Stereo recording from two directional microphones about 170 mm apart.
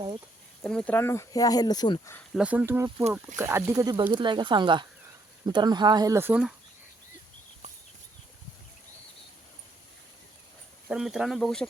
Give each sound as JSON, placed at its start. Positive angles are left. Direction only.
{"t": 0.6, "sound": "speech", "side_deg": 5}
{"t": 2.3, "sound": "speech", "side_deg": -5}
{"t": 10.8, "sound": "speech", "side_deg": -5}